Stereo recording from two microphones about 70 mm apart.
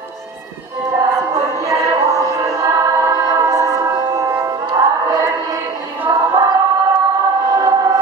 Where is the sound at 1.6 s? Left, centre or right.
Right.